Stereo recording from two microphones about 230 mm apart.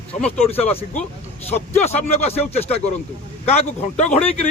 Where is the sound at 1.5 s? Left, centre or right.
Left.